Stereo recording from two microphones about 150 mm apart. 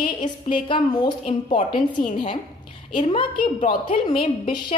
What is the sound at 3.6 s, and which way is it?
Speech, 55° left (ahead or behind).